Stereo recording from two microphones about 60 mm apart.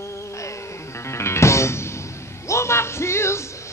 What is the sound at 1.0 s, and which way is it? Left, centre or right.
Music, left.